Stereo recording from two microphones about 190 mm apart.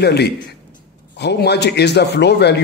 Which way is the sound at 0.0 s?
60° left (ahead or behind).